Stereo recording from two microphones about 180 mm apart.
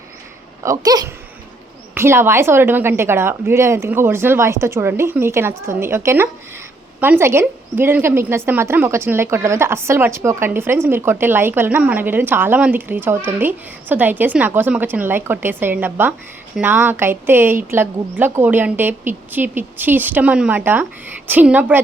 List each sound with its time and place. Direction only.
0.6 s a woman's voice: 20° right (ahead or behind)